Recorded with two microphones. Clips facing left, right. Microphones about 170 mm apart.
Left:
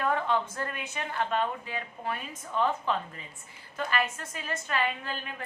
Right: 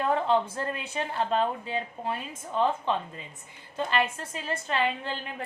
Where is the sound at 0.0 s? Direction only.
30° right (ahead or behind).